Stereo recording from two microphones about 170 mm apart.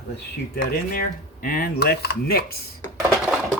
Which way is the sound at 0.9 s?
55° left (ahead or behind).